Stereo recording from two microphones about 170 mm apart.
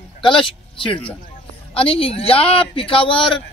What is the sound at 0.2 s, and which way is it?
Speech, 30° left (ahead or behind).